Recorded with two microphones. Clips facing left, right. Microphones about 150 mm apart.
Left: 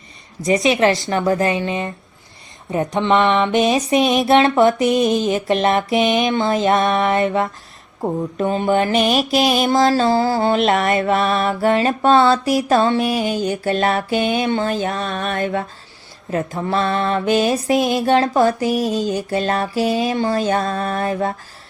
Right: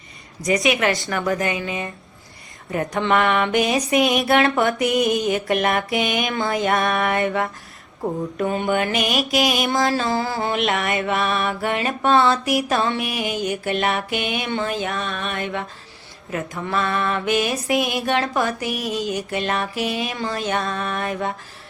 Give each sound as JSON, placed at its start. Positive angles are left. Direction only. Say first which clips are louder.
{"t": 0.4, "sound": "mantra", "louder": "left 4 dB", "side_deg": 25}
{"t": 2.6, "sound": "a sound", "louder": "left 4 dB", "side_deg": 20}
{"t": 8.0, "sound": "mantra", "louder": "left 3 dB", "side_deg": 25}